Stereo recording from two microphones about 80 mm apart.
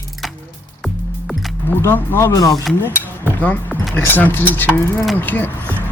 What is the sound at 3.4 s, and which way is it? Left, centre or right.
Speech, centre.